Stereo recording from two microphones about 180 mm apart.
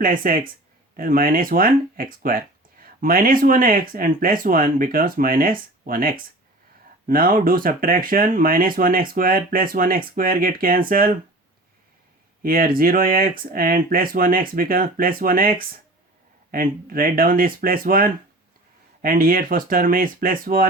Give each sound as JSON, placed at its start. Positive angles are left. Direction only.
{"t": 0.0, "sound": "speech", "side_deg": -50}
{"t": 12.4, "sound": "speech", "side_deg": -55}